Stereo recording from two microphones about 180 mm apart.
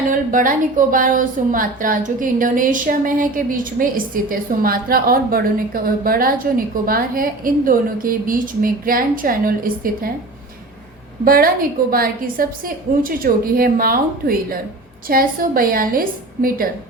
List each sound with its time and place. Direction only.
0.1 s a woman's voice: 50° right (ahead or behind)
11.3 s a woman's voice: 55° right (ahead or behind)